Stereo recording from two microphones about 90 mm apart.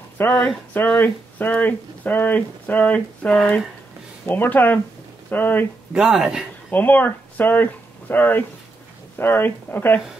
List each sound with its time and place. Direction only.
0.3 s speech: 5° left (ahead or behind)
0.8 s speech: 20° left (ahead or behind)
5.9 s speech: 10° right (ahead or behind)
6.7 s speech: 20° left (ahead or behind)